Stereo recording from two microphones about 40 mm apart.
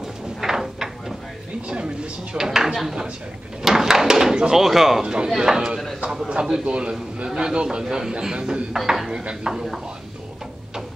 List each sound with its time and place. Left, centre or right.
0.0 s a sound: centre
2.3 s a man's voice: centre
3.6 s door: centre
5.0 s a man's voice: right
6.6 s a man's voice: right
8.7 s speech: centre
9.2 s a man's voice: right
9.5 s a man's voice: centre